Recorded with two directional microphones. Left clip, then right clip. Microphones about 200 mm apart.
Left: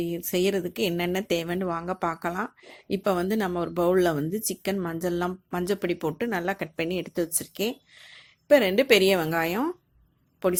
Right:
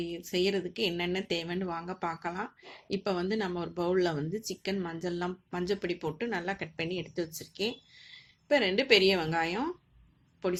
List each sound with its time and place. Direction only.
0.0 s speech: 45° left (ahead or behind)